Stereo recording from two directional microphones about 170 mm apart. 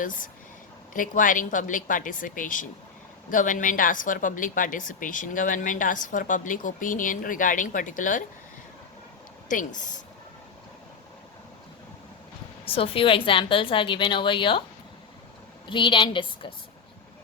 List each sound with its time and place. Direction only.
0.0 s a woman's voice: 50° left (ahead or behind)
9.5 s a woman's voice: 50° left (ahead or behind)
12.6 s a woman's voice: 35° left (ahead or behind)
15.6 s a woman's voice: 30° left (ahead or behind)